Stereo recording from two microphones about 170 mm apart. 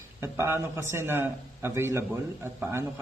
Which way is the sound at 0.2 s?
15° right (ahead or behind).